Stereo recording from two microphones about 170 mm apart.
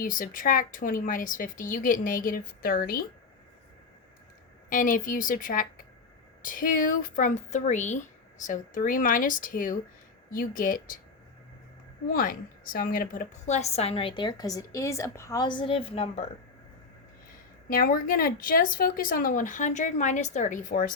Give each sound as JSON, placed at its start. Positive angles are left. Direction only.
{"t": 0.0, "sound": "speech", "side_deg": 55}
{"t": 4.7, "sound": "speech", "side_deg": 50}
{"t": 12.1, "sound": "a woman's voice", "side_deg": 55}
{"t": 17.7, "sound": "speech", "side_deg": 55}